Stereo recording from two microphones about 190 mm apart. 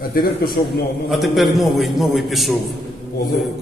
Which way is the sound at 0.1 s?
50° left (ahead or behind).